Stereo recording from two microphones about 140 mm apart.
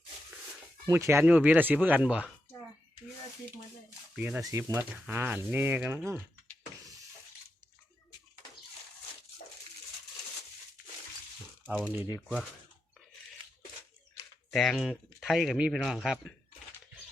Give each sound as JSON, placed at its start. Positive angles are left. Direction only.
{"t": 0.9, "sound": "speech", "side_deg": -20}
{"t": 4.1, "sound": "speech", "side_deg": -10}
{"t": 4.4, "sound": "speech", "side_deg": -20}
{"t": 11.8, "sound": "speech", "side_deg": -15}
{"t": 14.5, "sound": "speech", "side_deg": 0}